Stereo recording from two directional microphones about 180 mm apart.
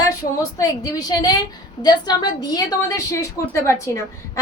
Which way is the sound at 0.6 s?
20° left (ahead or behind).